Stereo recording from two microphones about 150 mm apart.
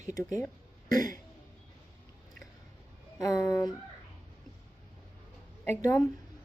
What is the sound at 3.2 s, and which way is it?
Speech, 20° left (ahead or behind).